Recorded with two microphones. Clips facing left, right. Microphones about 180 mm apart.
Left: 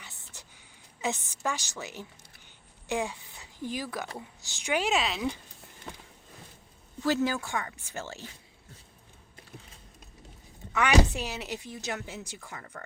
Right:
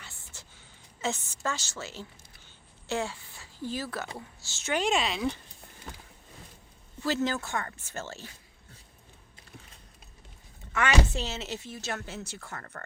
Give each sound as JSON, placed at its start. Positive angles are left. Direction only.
{"t": 0.0, "sound": "a sound", "side_deg": 15}
{"t": 1.0, "sound": "speech", "side_deg": 15}
{"t": 7.0, "sound": "speech", "side_deg": 15}
{"t": 10.7, "sound": "speech", "side_deg": 15}